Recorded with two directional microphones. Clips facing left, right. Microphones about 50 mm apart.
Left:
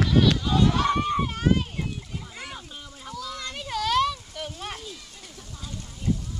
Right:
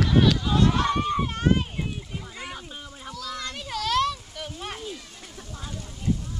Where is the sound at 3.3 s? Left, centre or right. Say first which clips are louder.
Right 1 dB; centre.